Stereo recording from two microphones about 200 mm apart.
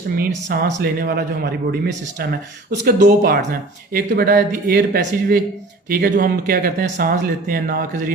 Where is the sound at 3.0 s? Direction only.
40° right (ahead or behind).